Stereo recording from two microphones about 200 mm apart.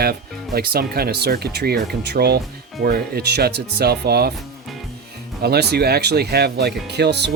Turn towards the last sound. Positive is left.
turn(degrees=-55)  # may be behind; listen again after turning